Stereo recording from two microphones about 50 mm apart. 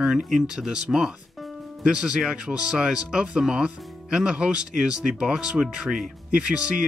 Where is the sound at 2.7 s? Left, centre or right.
Centre.